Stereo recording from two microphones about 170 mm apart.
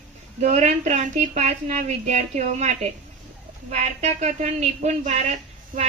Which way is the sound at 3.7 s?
40° right (ahead or behind).